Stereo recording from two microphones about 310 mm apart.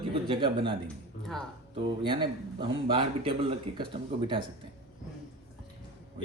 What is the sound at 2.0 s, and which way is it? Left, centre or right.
Speech, centre.